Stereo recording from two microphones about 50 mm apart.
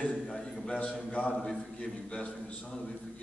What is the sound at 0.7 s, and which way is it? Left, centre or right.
A man's voice, left.